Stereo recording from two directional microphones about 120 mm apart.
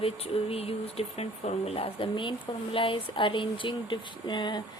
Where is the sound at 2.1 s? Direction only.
45° left (ahead or behind).